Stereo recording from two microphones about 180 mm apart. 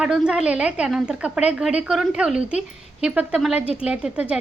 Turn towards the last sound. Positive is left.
turn(degrees=-5)  # may be behind; listen again after turning